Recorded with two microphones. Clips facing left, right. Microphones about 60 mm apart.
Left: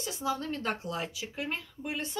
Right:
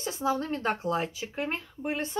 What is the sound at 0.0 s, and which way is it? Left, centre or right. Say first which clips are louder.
Speech: right 4 dB; right.